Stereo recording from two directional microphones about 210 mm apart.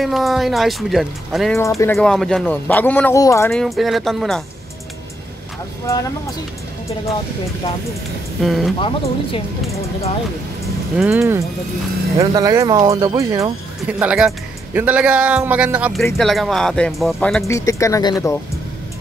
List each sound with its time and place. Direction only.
0.0 s speech: centre (ahead or behind)
3.6 s speech: centre (ahead or behind)
5.9 s speech: 15° left (ahead or behind)
8.4 s speech: centre (ahead or behind)
8.7 s a woman's voice: 25° left (ahead or behind)
11.0 s speech: 10° right (ahead or behind)
17.5 s speech: 15° left (ahead or behind)